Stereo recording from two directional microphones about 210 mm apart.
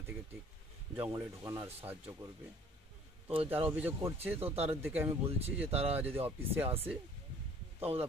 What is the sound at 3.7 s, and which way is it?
Speech, 10° right (ahead or behind).